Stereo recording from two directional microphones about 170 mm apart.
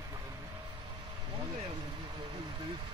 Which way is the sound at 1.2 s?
25° right (ahead or behind).